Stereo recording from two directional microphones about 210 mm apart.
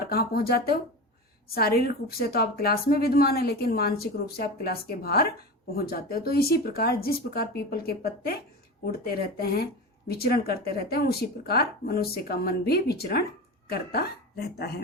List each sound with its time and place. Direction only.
0.1 s a woman's voice: 45° left (ahead or behind)